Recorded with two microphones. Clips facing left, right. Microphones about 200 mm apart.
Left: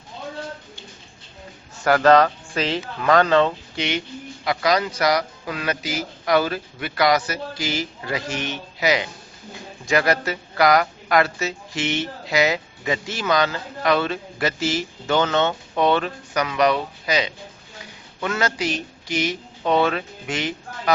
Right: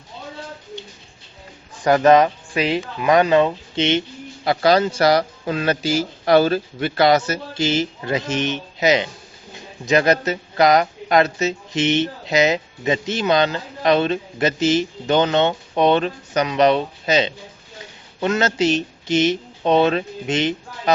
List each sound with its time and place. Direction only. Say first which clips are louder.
1.8 s speech: right 2 dB; 15° right (ahead or behind)
3.8 s speech: right 9 dB; 25° right (ahead or behind)